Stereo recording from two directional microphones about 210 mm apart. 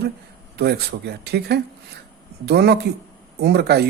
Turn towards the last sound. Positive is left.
turn(degrees=-50)  # may be behind; listen again after turning